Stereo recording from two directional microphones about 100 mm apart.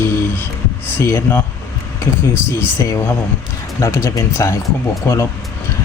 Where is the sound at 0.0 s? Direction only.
20° left (ahead or behind).